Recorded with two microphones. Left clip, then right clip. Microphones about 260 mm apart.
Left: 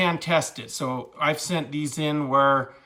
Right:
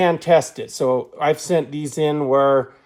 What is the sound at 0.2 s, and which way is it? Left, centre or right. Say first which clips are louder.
Speech: right 8 dB; centre.